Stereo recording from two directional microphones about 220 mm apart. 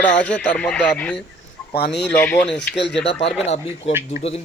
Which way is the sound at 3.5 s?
30° left (ahead or behind).